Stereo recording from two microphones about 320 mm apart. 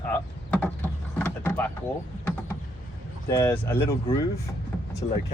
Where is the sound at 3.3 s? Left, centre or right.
Centre.